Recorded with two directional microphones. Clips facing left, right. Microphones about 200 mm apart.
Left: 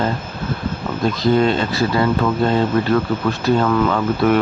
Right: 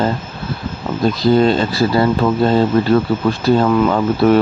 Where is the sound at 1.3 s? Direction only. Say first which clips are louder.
Right 3 dB; 35° right (ahead or behind).